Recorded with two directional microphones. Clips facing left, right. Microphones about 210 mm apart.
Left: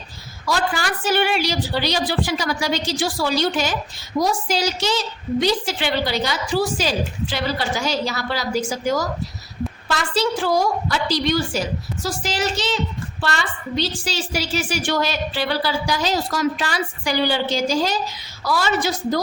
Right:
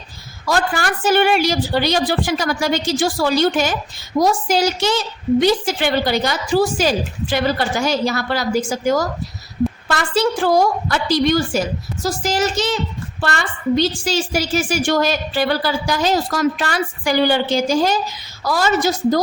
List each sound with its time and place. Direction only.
0.4 s a woman's voice: 50° right (ahead or behind)